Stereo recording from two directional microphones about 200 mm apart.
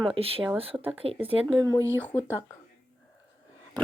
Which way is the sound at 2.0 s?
10° left (ahead or behind).